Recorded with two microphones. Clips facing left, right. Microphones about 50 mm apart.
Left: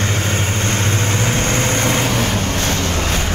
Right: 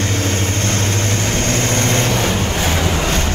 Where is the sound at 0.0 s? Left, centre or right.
Centre.